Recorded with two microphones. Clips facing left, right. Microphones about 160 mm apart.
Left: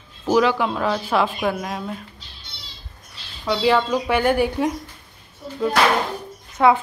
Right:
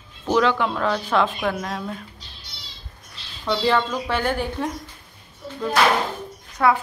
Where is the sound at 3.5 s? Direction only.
10° left (ahead or behind).